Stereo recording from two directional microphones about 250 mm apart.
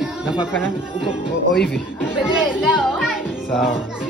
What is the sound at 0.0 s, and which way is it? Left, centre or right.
Music, centre.